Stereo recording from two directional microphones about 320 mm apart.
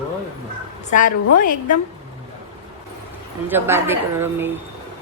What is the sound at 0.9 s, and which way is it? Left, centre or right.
Speech, left.